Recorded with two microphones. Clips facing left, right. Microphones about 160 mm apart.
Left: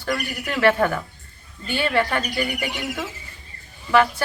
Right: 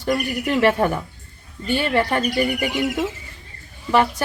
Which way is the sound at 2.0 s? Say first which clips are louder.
Right 4 dB; 25° right (ahead or behind).